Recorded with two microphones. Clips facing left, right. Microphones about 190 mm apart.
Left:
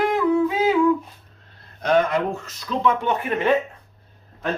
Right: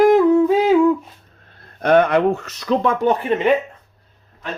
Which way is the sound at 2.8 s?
35° right (ahead or behind).